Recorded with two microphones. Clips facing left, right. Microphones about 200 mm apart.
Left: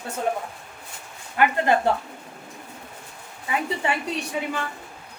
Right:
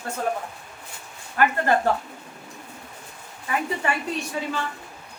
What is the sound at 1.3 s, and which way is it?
Speech, 15° left (ahead or behind).